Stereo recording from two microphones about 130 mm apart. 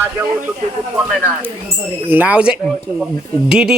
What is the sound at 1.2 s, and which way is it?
Speech, 15° right (ahead or behind).